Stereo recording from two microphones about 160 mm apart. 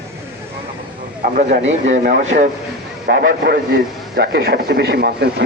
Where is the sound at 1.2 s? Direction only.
50° right (ahead or behind).